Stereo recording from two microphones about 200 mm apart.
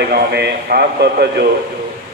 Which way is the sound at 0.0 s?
55° right (ahead or behind).